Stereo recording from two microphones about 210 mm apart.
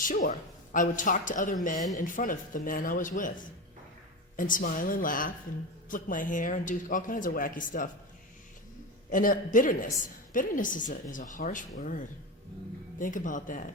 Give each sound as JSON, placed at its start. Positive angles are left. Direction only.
{"t": 0.0, "sound": "speech", "side_deg": 40}
{"t": 9.0, "sound": "speech", "side_deg": 40}